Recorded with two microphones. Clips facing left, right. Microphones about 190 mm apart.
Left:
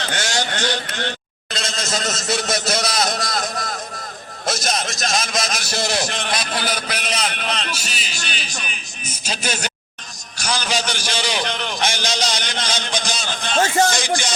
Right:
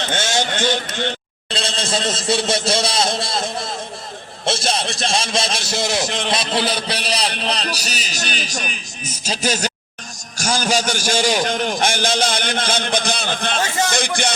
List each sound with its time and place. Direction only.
0.1 s a man's voice: 20° right (ahead or behind)
1.5 s a man's voice: 30° right (ahead or behind); by 13.6 s 55° right (ahead or behind)